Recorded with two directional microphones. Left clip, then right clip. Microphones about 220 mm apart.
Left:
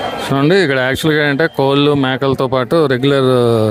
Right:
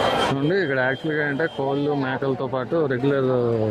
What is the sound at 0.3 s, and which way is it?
Speech, 30° left (ahead or behind).